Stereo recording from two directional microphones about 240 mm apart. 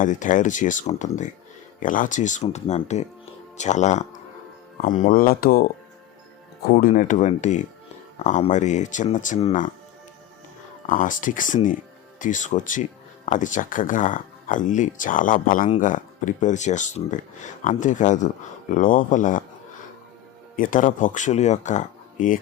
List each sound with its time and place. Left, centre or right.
0.0 s speech: left
6.7 s speech: left
10.8 s speech: left
20.6 s speech: left